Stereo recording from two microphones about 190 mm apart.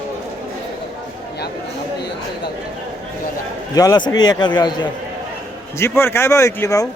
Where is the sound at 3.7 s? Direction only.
20° left (ahead or behind).